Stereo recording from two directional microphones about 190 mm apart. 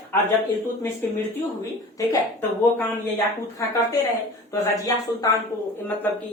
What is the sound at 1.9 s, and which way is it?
Speech, 10° left (ahead or behind).